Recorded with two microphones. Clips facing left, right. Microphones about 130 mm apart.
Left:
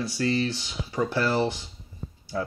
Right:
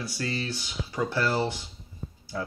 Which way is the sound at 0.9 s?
25° left (ahead or behind).